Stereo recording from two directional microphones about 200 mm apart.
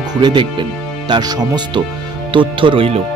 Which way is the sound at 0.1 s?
20° right (ahead or behind).